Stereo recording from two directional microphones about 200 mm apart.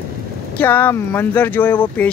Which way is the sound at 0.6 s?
10° left (ahead or behind).